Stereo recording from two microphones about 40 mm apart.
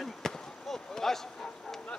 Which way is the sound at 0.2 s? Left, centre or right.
Centre.